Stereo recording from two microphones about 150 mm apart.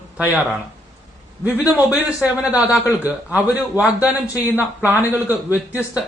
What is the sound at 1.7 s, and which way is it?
A man's voice, 10° right (ahead or behind).